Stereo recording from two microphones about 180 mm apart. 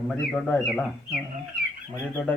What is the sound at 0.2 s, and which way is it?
Speech, 5° left (ahead or behind).